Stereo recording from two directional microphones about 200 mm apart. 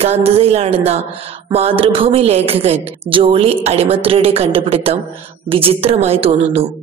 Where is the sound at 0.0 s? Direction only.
30° right (ahead or behind).